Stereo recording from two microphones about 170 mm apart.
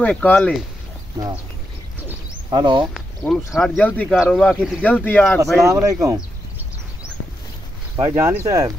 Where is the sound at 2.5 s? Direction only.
30° right (ahead or behind).